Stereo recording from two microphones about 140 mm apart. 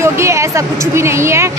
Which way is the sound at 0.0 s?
20° right (ahead or behind).